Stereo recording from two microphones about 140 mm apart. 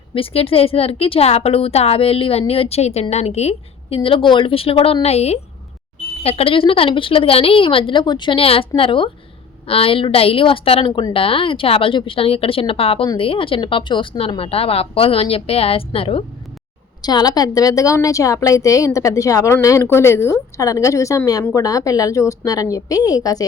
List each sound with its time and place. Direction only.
0.1 s a woman's voice: 40° left (ahead or behind)
17.0 s a woman's voice: 30° left (ahead or behind)